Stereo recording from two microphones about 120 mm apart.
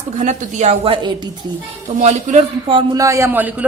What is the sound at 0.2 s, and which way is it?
Speech, 90° right.